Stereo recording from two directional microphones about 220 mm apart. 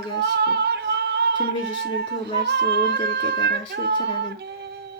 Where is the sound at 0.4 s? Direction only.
50° right (ahead or behind).